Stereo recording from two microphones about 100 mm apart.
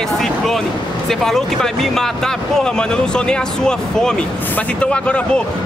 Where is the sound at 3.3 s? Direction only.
5° left (ahead or behind).